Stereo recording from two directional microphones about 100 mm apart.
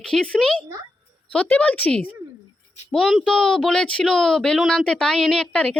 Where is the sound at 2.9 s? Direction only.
Centre (ahead or behind).